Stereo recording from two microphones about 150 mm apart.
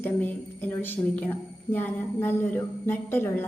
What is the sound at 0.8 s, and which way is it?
Speech, 10° left (ahead or behind).